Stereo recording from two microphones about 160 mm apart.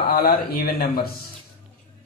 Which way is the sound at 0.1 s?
65° left (ahead or behind).